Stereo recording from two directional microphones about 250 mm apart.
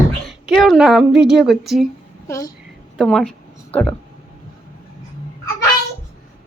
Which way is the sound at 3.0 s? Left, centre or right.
Centre.